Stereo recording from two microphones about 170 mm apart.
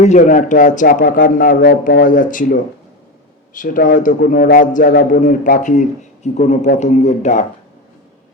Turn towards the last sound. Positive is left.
turn(degrees=45)  # may be behind; listen again after turning